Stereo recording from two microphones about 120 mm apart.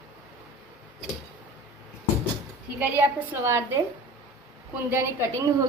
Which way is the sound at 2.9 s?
20° right (ahead or behind).